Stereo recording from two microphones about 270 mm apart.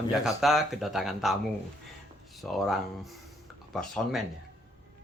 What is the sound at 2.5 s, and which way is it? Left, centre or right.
Speech, centre.